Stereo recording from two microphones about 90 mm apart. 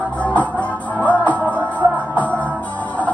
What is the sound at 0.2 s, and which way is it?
Music, 15° left (ahead or behind).